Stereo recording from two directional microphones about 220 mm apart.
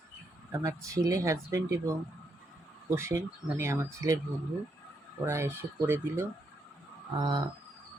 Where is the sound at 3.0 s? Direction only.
10° right (ahead or behind).